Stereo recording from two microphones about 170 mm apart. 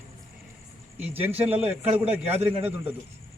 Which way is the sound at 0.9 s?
10° right (ahead or behind).